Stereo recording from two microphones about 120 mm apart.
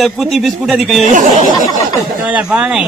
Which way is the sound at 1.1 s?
90° right.